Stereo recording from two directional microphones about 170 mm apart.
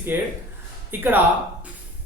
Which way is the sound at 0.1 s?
10° right (ahead or behind).